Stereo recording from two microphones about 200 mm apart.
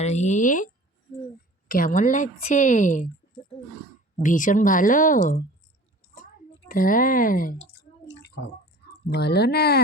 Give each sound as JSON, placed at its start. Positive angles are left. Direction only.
{"t": 0.0, "sound": "speech", "side_deg": 35}
{"t": 4.2, "sound": "speech", "side_deg": 40}
{"t": 6.7, "sound": "drip", "side_deg": 45}
{"t": 9.0, "sound": "speech", "side_deg": 55}